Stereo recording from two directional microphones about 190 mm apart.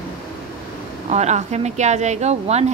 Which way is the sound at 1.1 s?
35° right (ahead or behind).